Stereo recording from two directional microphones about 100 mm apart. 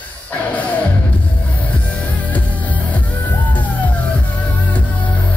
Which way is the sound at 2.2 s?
15° left (ahead or behind).